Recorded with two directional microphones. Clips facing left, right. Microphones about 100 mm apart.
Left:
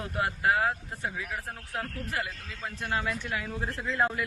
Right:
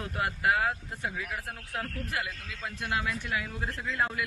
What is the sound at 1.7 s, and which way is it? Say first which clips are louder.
Speech: even; 30° left (ahead or behind).